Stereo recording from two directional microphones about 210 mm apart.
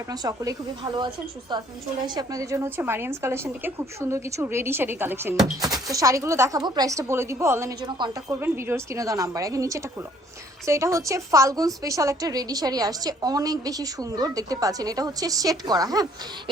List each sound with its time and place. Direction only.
0.1 s a woman's voice: 15° right (ahead or behind)
8.3 s a woman's voice: 10° right (ahead or behind)